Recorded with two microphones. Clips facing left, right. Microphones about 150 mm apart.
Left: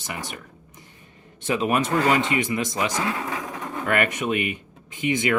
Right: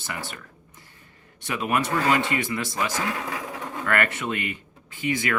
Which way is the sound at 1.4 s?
25° left (ahead or behind).